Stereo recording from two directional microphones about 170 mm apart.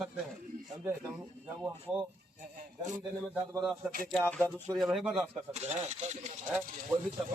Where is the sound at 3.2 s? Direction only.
10° right (ahead or behind).